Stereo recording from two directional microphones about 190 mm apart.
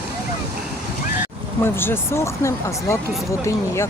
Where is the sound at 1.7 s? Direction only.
10° left (ahead or behind).